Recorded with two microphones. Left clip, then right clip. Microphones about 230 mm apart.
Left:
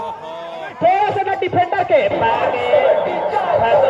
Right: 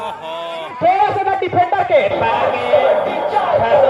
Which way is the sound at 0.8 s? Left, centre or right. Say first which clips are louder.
Right 1 dB; right.